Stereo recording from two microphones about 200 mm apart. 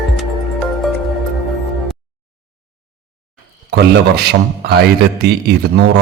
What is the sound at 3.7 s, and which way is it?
A man's voice, 55° right (ahead or behind).